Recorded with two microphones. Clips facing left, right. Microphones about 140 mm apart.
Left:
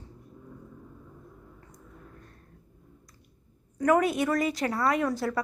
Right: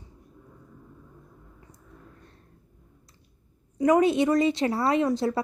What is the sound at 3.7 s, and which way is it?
Speech, 15° right (ahead or behind).